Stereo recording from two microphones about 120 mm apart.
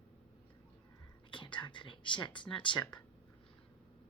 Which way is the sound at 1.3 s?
40° left (ahead or behind).